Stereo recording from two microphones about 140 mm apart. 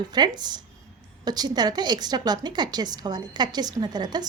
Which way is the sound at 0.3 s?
30° right (ahead or behind).